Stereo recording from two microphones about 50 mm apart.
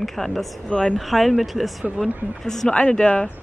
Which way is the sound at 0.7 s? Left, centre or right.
Centre.